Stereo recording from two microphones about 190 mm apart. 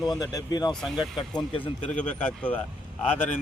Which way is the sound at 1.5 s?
25° left (ahead or behind).